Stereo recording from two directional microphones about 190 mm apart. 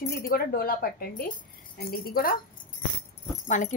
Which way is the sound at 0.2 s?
55° left (ahead or behind).